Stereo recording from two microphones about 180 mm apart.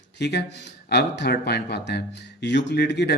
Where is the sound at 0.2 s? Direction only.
70° left (ahead or behind).